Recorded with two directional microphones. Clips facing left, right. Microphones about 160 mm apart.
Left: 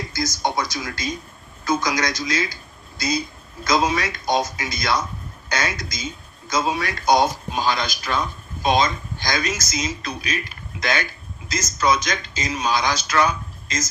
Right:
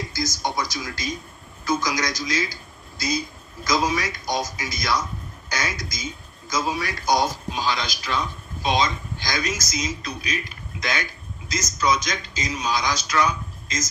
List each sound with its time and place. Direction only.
0.1 s speech: 60° left (ahead or behind)
3.6 s speech: 60° left (ahead or behind)
12.0 s a man's voice: 60° left (ahead or behind)